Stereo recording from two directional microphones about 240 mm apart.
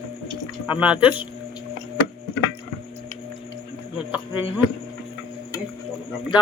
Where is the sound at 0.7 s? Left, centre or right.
Centre.